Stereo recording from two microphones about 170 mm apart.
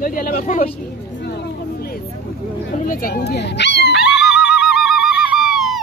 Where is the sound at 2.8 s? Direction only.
55° left (ahead or behind); by 3.9 s 85° left.